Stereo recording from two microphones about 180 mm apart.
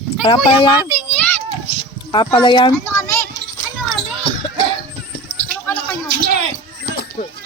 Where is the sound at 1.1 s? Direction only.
5° left (ahead or behind).